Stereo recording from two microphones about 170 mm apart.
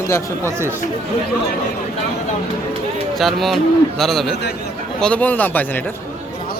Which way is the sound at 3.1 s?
Centre (ahead or behind).